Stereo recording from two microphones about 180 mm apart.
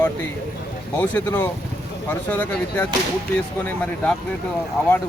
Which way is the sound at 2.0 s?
10° left (ahead or behind).